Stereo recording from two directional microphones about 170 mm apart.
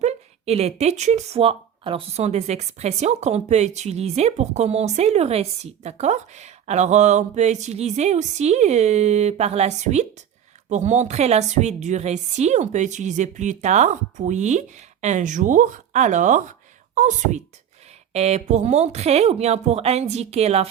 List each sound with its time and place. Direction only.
0.0 s a woman's voice: 40° right (ahead or behind)